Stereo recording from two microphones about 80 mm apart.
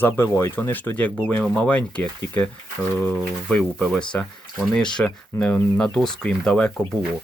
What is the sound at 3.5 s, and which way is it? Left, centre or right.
Speech, centre.